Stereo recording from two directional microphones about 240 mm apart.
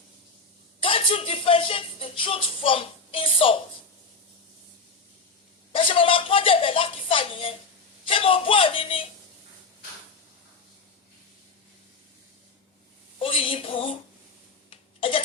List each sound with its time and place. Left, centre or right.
0.8 s speech: left
5.7 s a woman's voice: left
13.1 s a woman's voice: left
14.7 s a sound: left